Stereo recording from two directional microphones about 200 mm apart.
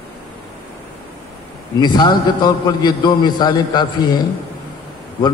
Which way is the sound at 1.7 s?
20° left (ahead or behind).